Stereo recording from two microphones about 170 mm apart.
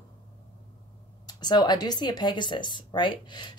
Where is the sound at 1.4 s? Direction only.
25° left (ahead or behind).